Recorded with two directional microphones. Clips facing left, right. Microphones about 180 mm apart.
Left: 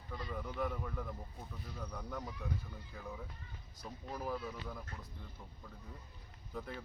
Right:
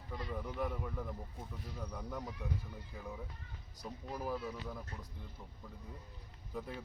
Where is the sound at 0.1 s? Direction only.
10° right (ahead or behind).